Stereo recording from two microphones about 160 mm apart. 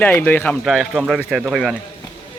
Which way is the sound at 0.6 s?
Centre (ahead or behind).